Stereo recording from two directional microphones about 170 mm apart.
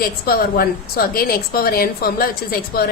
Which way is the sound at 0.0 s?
60° left (ahead or behind).